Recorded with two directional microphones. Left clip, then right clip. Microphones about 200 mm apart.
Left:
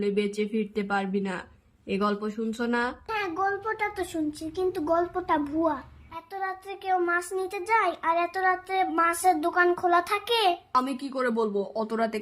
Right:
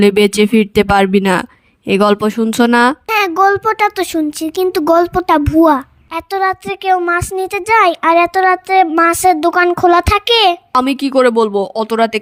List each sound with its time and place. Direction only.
0.0 s a child's voice: 55° right (ahead or behind)